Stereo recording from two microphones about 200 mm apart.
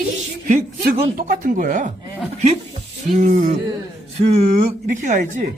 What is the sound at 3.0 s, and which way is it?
A woman's voice, 35° right (ahead or behind).